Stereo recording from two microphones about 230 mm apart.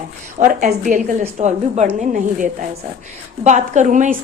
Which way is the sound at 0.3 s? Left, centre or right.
Right.